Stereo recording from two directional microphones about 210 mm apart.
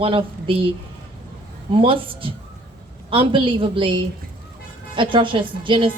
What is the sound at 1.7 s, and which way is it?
A woman's voice, 25° right (ahead or behind).